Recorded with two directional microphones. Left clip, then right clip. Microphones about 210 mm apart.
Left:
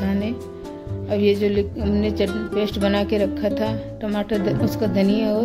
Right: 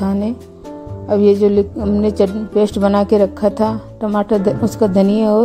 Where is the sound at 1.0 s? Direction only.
35° right (ahead or behind).